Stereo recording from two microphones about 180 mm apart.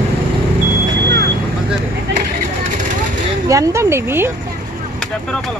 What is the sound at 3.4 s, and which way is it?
Speech, 20° right (ahead or behind).